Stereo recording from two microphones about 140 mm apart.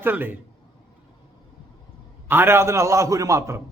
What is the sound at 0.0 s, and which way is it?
Speech, 15° right (ahead or behind).